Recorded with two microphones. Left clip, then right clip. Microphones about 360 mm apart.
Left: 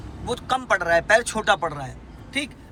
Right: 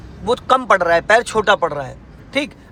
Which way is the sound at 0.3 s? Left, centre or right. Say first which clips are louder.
Right 9 dB; centre.